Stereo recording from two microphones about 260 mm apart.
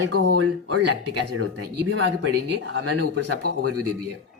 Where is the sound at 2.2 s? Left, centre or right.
Right.